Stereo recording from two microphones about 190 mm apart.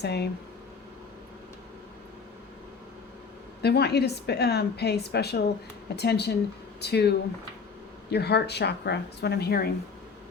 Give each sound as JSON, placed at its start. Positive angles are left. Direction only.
{"t": 0.0, "sound": "a woman's voice", "side_deg": 60}
{"t": 3.6, "sound": "a woman's voice", "side_deg": 60}
{"t": 8.1, "sound": "a woman's voice", "side_deg": 60}